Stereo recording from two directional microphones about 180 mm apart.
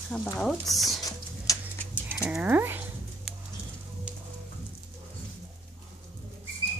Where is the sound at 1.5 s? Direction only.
20° left (ahead or behind).